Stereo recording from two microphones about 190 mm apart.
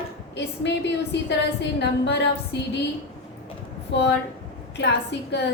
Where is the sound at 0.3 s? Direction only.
65° left (ahead or behind).